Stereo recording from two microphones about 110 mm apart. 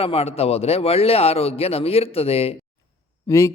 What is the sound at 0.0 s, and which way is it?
A man's voice, 60° left (ahead or behind).